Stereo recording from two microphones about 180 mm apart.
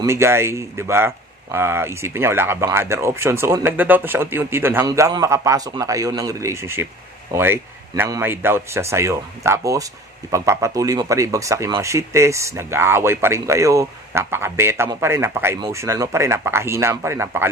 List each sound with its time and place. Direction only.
0.0 s speech: 15° right (ahead or behind)